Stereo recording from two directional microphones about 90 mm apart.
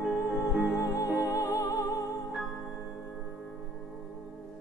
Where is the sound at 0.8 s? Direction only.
40° left (ahead or behind).